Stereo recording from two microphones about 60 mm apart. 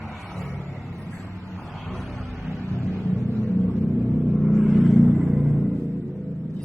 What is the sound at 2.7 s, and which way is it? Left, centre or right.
Vehicle, right.